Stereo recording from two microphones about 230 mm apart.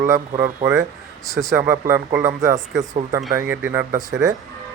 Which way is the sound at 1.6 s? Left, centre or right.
Centre.